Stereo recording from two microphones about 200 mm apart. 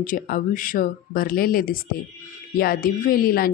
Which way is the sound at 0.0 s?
45° left (ahead or behind).